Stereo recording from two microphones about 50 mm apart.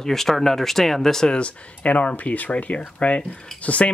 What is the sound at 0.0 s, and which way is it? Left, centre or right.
Speech, centre.